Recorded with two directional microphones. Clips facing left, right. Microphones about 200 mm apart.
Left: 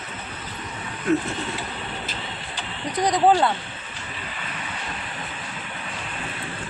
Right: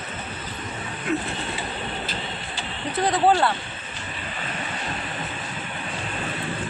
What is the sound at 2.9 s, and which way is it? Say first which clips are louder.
Speech: left 1 dB; 15° left (ahead or behind).